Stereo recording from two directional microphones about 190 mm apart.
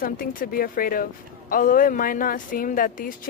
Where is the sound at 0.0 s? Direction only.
50° left (ahead or behind).